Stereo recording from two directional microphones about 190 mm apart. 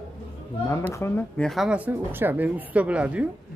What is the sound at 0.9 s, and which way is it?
Speech, 15° left (ahead or behind).